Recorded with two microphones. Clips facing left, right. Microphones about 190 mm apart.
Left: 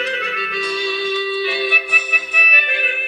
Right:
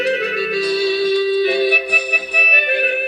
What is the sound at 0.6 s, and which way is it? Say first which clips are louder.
Music: right 5 dB; 40° right (ahead or behind).